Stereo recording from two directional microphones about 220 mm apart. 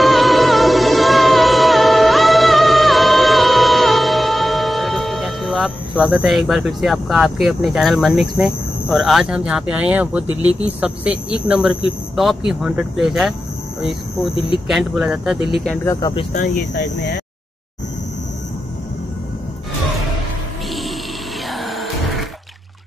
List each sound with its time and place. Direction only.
0.0 s music: centre (ahead or behind)
13.7 s speech: centre (ahead or behind)
15.6 s speech: 10° left (ahead or behind)
16.7 s speech: 50° left (ahead or behind)
21.5 s music: centre (ahead or behind)